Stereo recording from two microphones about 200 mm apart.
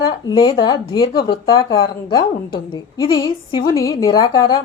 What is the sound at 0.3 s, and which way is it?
Speech, 20° left (ahead or behind).